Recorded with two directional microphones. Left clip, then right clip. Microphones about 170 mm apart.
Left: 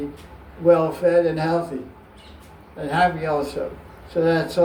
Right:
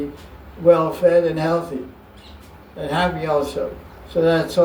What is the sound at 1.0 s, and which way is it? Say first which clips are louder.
Speech: right 5 dB; 50° right (ahead or behind).